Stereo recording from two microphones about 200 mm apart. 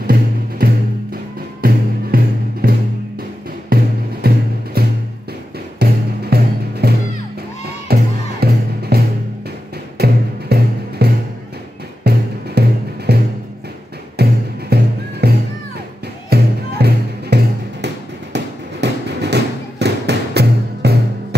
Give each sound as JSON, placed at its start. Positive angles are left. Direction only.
{"t": 0.0, "sound": "music", "side_deg": -45}
{"t": 3.7, "sound": "music", "side_deg": -50}
{"t": 5.8, "sound": "music", "side_deg": -50}
{"t": 17.8, "sound": "a sound", "side_deg": -60}